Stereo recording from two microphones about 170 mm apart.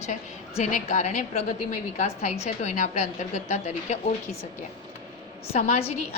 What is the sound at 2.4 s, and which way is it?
Speech, 40° left (ahead or behind).